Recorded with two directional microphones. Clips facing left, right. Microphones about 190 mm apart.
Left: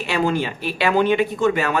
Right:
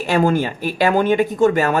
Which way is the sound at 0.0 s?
45° right (ahead or behind).